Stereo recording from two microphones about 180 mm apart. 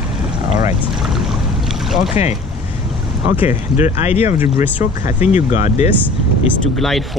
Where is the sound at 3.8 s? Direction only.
35° left (ahead or behind).